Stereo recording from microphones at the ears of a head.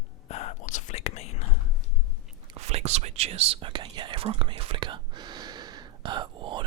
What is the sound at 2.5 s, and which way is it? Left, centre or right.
Whispering, right.